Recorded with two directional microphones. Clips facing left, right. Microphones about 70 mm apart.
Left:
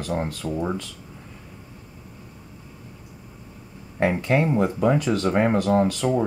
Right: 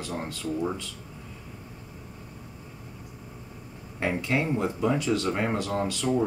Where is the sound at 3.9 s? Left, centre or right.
Left.